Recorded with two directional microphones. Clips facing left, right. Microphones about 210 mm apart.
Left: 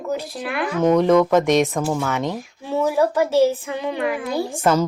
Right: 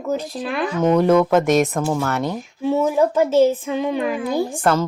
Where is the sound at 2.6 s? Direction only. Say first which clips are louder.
Right 2 dB; 15° right (ahead or behind).